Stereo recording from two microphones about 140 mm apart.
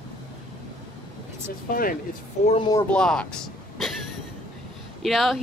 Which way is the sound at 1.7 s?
90° left.